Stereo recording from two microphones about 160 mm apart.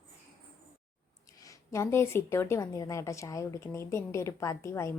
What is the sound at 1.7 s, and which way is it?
Speech, 15° left (ahead or behind).